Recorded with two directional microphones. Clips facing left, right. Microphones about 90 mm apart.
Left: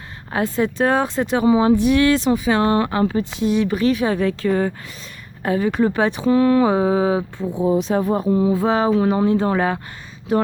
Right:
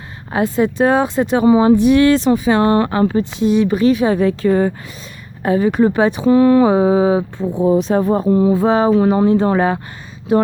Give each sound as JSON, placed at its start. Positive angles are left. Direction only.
{"t": 0.3, "sound": "speech", "side_deg": -20}
{"t": 1.5, "sound": "speech", "side_deg": -40}
{"t": 1.8, "sound": "speech", "side_deg": -30}
{"t": 3.4, "sound": "speech", "side_deg": -20}
{"t": 6.2, "sound": "speech", "side_deg": -30}
{"t": 7.8, "sound": "speech", "side_deg": -40}
{"t": 8.3, "sound": "a sound", "side_deg": -60}
{"t": 8.5, "sound": "speech", "side_deg": -30}
{"t": 8.9, "sound": "speech", "side_deg": -40}